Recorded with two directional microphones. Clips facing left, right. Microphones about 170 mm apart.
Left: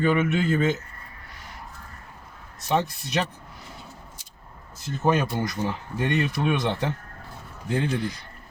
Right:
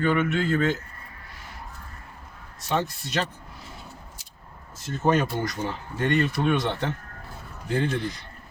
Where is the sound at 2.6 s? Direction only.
15° left (ahead or behind).